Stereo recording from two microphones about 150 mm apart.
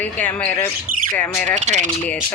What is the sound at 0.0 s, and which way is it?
Speech, 10° left (ahead or behind).